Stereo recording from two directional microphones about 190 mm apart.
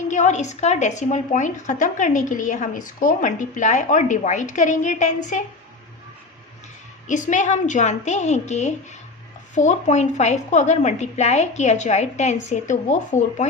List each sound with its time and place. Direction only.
0.1 s a woman's voice: 40° left (ahead or behind)
7.1 s a woman's voice: 40° left (ahead or behind)